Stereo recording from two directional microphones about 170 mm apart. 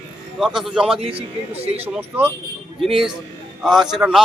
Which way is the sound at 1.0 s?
35° right (ahead or behind).